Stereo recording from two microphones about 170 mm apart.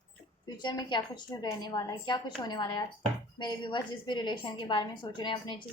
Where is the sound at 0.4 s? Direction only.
25° left (ahead or behind).